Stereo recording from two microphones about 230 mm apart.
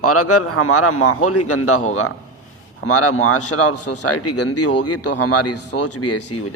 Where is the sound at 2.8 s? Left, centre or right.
Left.